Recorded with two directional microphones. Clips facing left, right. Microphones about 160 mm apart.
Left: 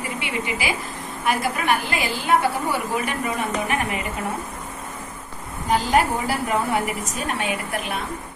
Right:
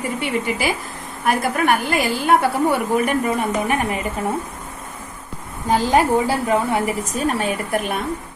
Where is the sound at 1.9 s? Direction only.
50° right (ahead or behind).